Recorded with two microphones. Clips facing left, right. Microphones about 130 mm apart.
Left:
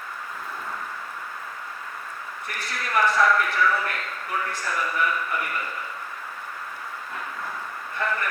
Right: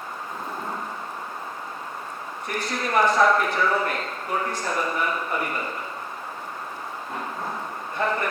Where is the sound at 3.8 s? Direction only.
30° right (ahead or behind).